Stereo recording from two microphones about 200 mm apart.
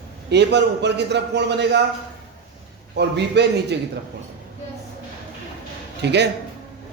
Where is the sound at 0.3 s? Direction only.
60° right (ahead or behind).